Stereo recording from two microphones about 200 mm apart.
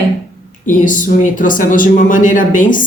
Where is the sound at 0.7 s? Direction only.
40° left (ahead or behind).